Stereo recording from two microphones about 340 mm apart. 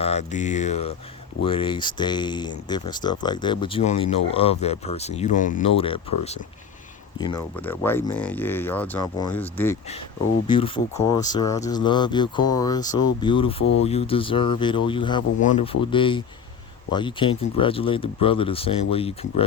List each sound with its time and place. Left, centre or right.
0.0 s speech: centre
7.2 s speech: centre